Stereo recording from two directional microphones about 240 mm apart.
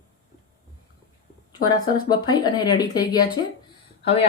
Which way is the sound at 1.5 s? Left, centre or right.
Centre.